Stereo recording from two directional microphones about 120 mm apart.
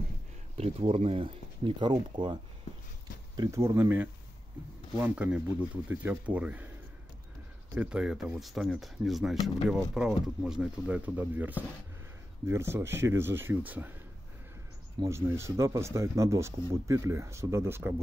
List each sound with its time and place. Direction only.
0.6 s speech: 55° right (ahead or behind); by 2.3 s 40° right (ahead or behind)
3.3 s speech: 25° right (ahead or behind)
7.7 s speech: 10° right (ahead or behind)
15.0 s speech: 25° right (ahead or behind)